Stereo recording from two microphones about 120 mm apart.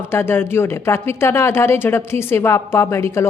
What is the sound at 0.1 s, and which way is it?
Speech, 20° left (ahead or behind).